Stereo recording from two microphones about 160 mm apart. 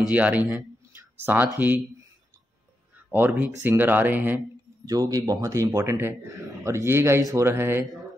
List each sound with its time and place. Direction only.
0.1 s speech: 10° right (ahead or behind)
3.1 s speech: 10° right (ahead or behind)
4.8 s speech: 20° right (ahead or behind)